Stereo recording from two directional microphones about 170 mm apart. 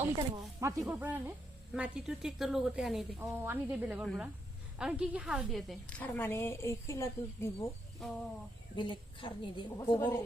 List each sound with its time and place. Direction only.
0.2 s speech: 20° right (ahead or behind); by 3.2 s centre (ahead or behind)
3.2 s a woman's voice: 10° right (ahead or behind); by 7.7 s 15° left (ahead or behind)
8.7 s a woman's voice: 30° left (ahead or behind)